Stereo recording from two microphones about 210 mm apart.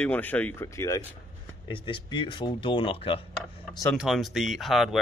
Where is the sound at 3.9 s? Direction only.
Centre (ahead or behind).